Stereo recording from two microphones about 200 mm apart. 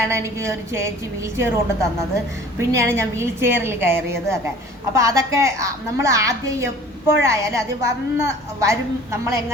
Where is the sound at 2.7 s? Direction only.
15° right (ahead or behind).